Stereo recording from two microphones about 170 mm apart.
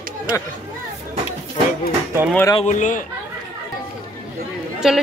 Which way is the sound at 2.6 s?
45° left (ahead or behind).